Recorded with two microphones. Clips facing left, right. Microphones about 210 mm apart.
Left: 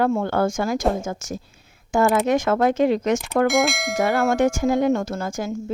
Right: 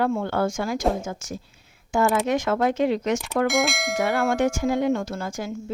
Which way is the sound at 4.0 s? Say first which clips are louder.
Left 3 dB; 45° left (ahead or behind).